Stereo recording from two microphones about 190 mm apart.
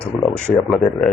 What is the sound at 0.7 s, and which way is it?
Speech, 5° left (ahead or behind).